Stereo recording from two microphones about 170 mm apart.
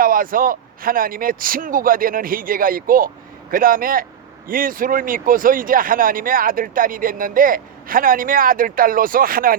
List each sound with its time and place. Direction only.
0.0 s speech: 55° right (ahead or behind)